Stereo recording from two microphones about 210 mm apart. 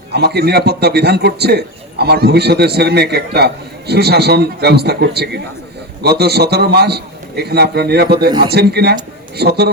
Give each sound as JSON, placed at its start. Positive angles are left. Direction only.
{"t": 0.1, "sound": "a man's voice", "side_deg": -50}
{"t": 8.3, "sound": "a man's voice", "side_deg": -20}
{"t": 8.5, "sound": "a man's voice", "side_deg": -50}